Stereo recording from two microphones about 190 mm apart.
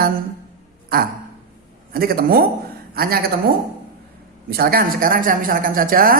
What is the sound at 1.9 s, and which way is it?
A woman's voice, 50° right (ahead or behind).